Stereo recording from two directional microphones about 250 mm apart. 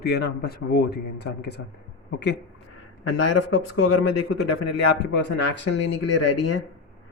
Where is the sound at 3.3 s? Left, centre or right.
Left.